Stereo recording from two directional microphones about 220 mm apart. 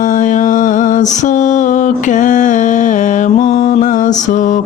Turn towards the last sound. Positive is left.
turn(degrees=35)  # may be behind; listen again after turning